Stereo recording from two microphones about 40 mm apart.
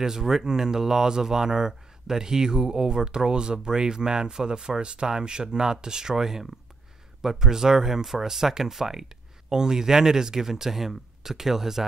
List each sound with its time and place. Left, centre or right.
0.0 s speech: centre